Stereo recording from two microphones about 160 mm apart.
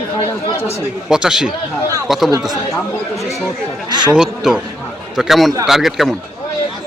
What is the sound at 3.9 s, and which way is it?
Speech, 30° right (ahead or behind).